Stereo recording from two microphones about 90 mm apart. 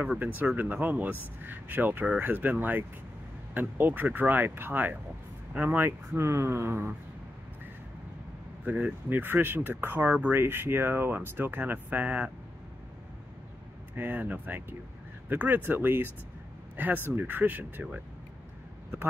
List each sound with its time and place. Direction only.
0.6 s speech: 20° right (ahead or behind)
5.9 s speech: 30° right (ahead or behind)
8.6 s speech: 15° right (ahead or behind)
13.9 s speech: 20° right (ahead or behind)